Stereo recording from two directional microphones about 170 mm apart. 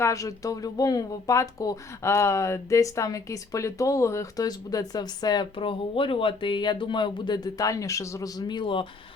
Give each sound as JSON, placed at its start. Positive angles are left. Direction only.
{"t": 0.0, "sound": "speech", "side_deg": 20}